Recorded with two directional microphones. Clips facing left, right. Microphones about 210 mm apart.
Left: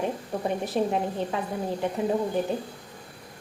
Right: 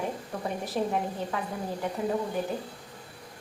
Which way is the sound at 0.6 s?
20° left (ahead or behind).